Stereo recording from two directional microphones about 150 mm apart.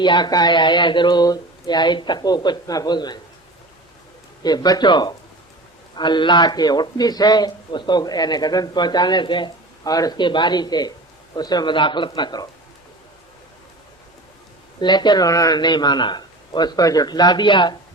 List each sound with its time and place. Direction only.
0.0 s a man's voice: 30° left (ahead or behind)
4.4 s a man's voice: 25° left (ahead or behind)
14.8 s a man's voice: 30° left (ahead or behind)